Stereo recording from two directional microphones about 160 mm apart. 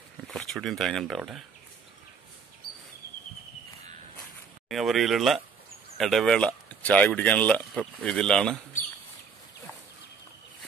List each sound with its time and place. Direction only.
0.3 s speech: 5° left (ahead or behind)
4.6 s speech: centre (ahead or behind)